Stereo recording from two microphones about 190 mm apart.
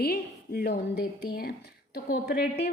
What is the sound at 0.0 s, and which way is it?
A woman's voice, 55° left (ahead or behind).